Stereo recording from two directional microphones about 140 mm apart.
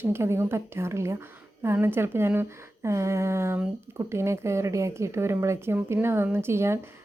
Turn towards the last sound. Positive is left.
turn(degrees=-20)  # may be behind; listen again after turning